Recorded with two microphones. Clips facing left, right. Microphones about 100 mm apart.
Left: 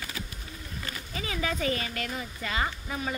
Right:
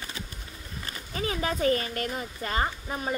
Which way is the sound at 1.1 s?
40° right (ahead or behind).